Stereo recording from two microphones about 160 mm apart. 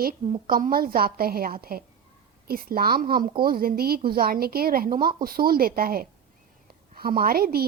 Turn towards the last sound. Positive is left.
turn(degrees=-70)  # may be behind; listen again after turning